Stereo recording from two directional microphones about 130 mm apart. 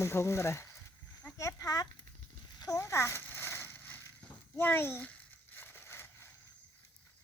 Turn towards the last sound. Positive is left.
turn(degrees=20)  # may be behind; listen again after turning